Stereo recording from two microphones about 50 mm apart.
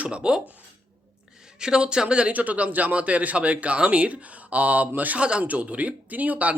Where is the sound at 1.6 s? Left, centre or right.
Centre.